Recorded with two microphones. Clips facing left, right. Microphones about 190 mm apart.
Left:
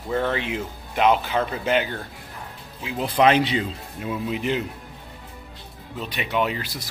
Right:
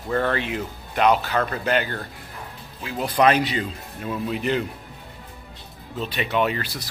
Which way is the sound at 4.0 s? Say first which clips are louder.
Even; 10° left (ahead or behind).